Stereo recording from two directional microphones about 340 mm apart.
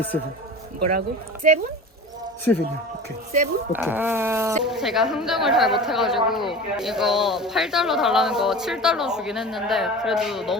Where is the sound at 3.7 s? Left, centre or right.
Centre.